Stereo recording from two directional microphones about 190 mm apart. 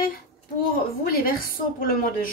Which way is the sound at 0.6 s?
50° left (ahead or behind).